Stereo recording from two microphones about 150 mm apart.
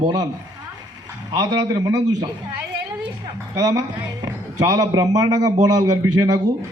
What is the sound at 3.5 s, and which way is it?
A man's voice, 25° right (ahead or behind).